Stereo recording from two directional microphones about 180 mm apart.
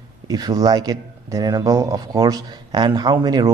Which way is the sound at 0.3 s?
20° right (ahead or behind).